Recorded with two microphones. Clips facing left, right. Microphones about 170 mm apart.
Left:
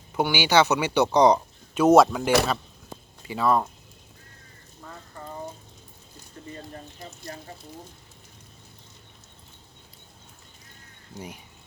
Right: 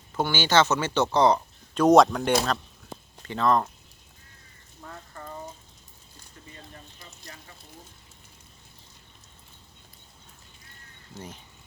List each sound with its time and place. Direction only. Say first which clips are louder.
0.1 s speech: left 2 dB; 10° left (ahead or behind)
1.8 s speech: left 1 dB; 5° left (ahead or behind)
7.3 s a sound: left 9 dB; 40° left (ahead or behind)
11.1 s speech: left 2 dB; 10° left (ahead or behind)